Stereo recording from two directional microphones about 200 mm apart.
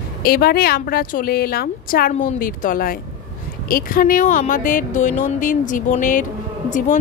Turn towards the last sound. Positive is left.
turn(degrees=40)  # may be behind; listen again after turning